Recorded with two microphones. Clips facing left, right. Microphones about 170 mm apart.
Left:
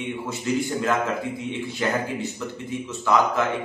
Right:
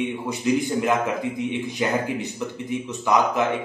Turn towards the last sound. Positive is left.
turn(degrees=-15)  # may be behind; listen again after turning